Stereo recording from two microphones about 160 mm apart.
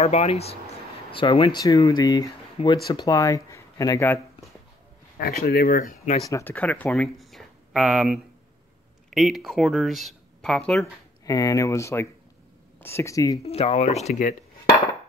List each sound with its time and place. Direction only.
0.0 s speech: 40° left (ahead or behind); by 4.2 s 20° left (ahead or behind)
5.1 s speech: 70° left (ahead or behind)
6.3 s speech: 10° left (ahead or behind)
11.2 s speech: 20° left (ahead or behind)
13.4 s speech: 40° left (ahead or behind)